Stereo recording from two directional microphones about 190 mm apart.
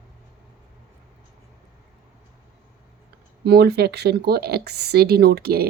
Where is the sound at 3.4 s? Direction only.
60° right (ahead or behind).